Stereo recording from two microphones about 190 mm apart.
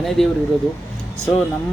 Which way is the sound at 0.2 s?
Centre (ahead or behind).